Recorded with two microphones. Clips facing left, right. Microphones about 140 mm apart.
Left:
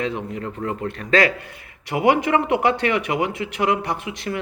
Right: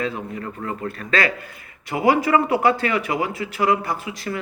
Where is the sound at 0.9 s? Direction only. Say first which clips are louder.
Left 4 dB; 20° left (ahead or behind).